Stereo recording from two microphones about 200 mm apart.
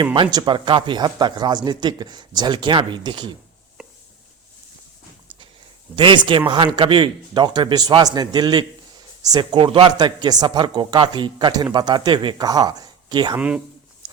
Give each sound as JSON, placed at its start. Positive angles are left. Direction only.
{"t": 0.0, "sound": "speech", "side_deg": -25}
{"t": 6.0, "sound": "speech", "side_deg": -25}
{"t": 13.3, "sound": "speech", "side_deg": -5}